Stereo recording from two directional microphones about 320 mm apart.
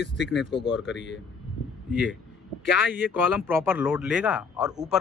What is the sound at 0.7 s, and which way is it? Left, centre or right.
Speech, centre.